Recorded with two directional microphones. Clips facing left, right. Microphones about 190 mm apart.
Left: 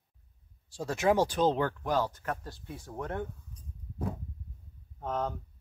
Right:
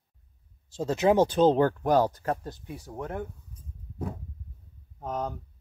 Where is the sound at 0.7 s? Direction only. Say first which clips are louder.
Right 4 dB; 20° right (ahead or behind).